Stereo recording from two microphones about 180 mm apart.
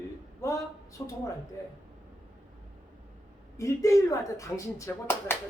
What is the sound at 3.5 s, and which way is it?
Speech, 15° left (ahead or behind).